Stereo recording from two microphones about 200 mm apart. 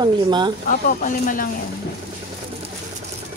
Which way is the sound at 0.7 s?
40° left (ahead or behind).